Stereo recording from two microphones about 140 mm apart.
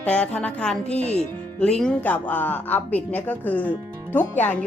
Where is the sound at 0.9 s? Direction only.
50° left (ahead or behind).